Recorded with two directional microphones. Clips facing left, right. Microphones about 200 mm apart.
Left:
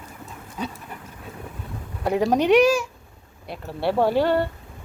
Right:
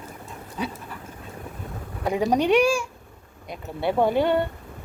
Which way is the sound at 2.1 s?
5° left (ahead or behind).